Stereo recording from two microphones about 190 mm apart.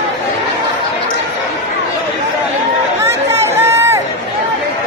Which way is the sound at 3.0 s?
15° right (ahead or behind).